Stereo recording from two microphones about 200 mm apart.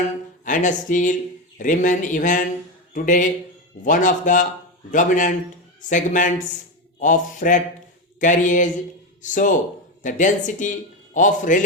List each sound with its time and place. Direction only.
0.4 s a man's voice: 40° left (ahead or behind)